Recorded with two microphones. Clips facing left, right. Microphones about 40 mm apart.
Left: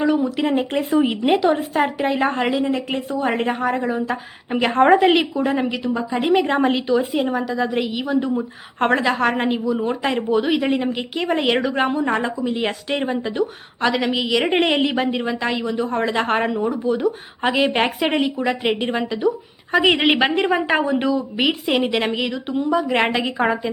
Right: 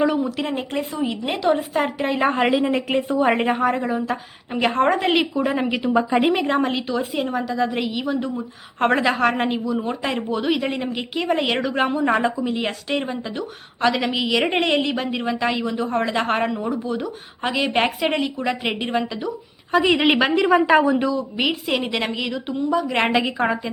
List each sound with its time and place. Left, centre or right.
0.0 s a woman's voice: centre
0.9 s a woman's voice: left
1.3 s a woman's voice: centre
5.8 s a woman's voice: right
6.2 s a woman's voice: centre
14.6 s a woman's voice: centre
20.0 s a woman's voice: left
21.1 s a woman's voice: centre